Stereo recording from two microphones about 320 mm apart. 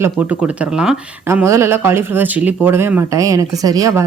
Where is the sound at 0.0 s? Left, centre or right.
Centre.